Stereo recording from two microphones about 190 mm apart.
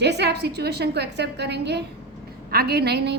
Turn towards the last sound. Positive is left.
turn(degrees=-60)  # may be behind; listen again after turning